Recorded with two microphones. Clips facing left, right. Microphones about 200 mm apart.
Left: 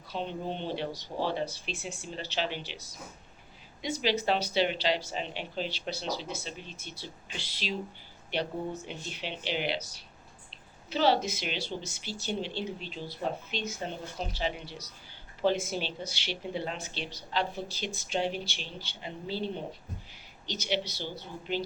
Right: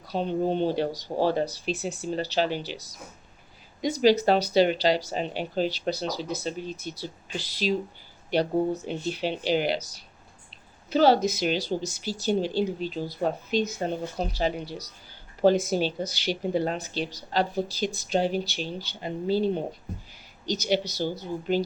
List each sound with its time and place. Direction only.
0.1 s speech: 40° right (ahead or behind)